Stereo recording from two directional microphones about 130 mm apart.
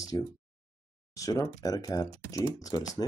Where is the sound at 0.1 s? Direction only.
30° left (ahead or behind).